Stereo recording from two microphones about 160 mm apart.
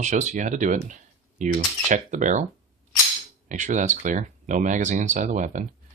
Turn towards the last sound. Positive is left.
turn(degrees=-50)  # may be behind; listen again after turning